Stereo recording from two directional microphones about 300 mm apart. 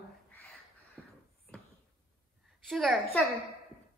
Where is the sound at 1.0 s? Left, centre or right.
Centre.